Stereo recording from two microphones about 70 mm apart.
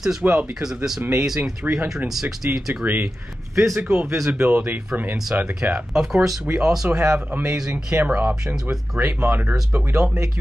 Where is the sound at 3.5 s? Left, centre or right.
Right.